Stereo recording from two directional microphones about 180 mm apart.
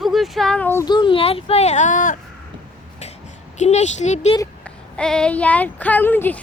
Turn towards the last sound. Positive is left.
turn(degrees=10)  # may be behind; listen again after turning